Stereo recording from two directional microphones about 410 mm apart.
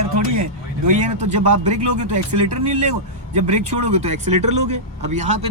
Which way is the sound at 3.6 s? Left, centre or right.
Right.